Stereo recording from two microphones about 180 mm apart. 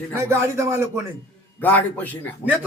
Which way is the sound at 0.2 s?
15° right (ahead or behind).